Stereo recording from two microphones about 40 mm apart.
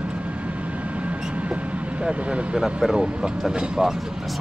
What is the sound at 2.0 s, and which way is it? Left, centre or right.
Speech, right.